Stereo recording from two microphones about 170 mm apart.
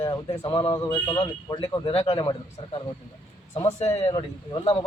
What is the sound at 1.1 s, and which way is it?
A man's voice, 30° left (ahead or behind).